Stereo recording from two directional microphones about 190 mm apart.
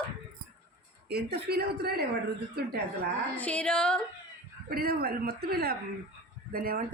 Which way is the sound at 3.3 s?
5° left (ahead or behind).